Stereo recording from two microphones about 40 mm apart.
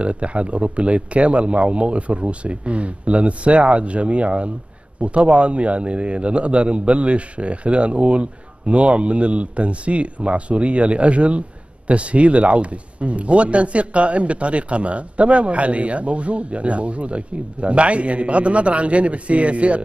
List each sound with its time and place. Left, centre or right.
0.0 s speech: right